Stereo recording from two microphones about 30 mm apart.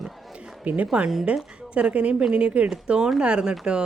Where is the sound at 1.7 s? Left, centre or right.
Right.